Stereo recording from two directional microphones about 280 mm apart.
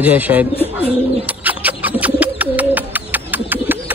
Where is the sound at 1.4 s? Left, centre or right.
Centre.